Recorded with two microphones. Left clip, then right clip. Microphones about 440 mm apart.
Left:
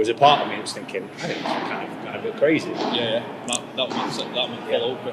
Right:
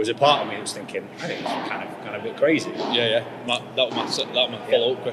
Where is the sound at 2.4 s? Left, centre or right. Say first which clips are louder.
Even; centre.